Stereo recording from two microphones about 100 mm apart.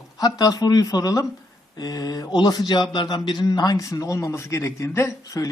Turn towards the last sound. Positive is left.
turn(degrees=30)  # may be behind; listen again after turning